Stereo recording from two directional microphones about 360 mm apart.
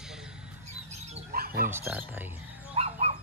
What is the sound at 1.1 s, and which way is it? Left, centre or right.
Bird, right.